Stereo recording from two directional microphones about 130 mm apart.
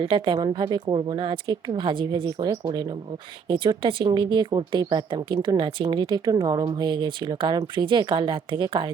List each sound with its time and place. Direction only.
0.0 s speech: 40° right (ahead or behind)